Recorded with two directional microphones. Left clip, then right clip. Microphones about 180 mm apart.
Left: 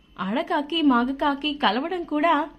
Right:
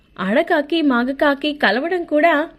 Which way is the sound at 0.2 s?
20° right (ahead or behind).